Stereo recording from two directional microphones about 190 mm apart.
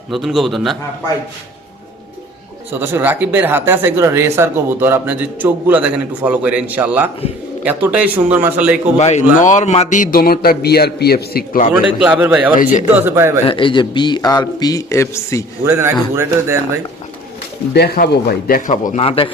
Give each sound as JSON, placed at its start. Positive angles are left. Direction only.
{"t": 0.1, "sound": "a man's voice", "side_deg": 0}
{"t": 2.8, "sound": "speech", "side_deg": -10}
{"t": 9.0, "sound": "a man's voice", "side_deg": 35}
{"t": 11.9, "sound": "speech", "side_deg": -5}
{"t": 13.4, "sound": "a man's voice", "side_deg": 25}
{"t": 15.6, "sound": "speech", "side_deg": -15}
{"t": 17.7, "sound": "a man's voice", "side_deg": 55}
{"t": 19.0, "sound": "a man's voice", "side_deg": 30}